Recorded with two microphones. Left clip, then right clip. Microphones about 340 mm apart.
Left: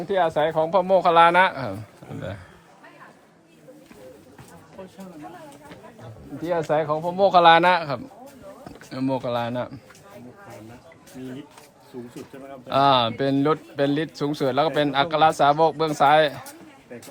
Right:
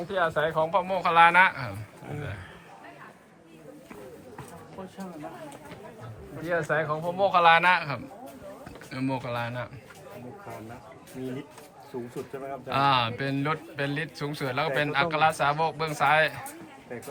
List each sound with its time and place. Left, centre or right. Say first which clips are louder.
0.1 s speech: left 5 dB; centre
6.4 s speech: left 4 dB; centre
12.6 s speech: left 6 dB; centre